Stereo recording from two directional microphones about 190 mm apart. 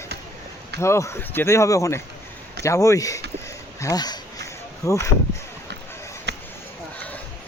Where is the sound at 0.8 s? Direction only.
15° left (ahead or behind).